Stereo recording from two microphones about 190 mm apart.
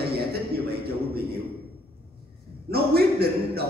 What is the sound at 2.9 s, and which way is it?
Speech, 55° right (ahead or behind).